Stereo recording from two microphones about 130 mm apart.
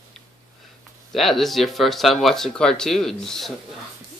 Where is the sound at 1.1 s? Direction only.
Centre (ahead or behind).